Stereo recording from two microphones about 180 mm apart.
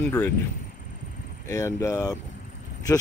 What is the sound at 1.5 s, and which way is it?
Speech, 15° left (ahead or behind).